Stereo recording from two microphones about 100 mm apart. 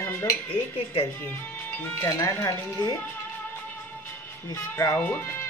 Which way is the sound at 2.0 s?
35° left (ahead or behind).